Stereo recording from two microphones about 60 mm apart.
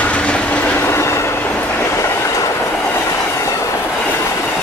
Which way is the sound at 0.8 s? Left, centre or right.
Left.